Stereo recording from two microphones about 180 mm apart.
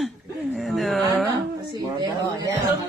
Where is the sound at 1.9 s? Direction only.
20° right (ahead or behind).